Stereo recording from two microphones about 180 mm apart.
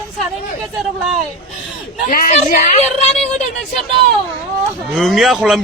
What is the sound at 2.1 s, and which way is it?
Speech, 50° left (ahead or behind).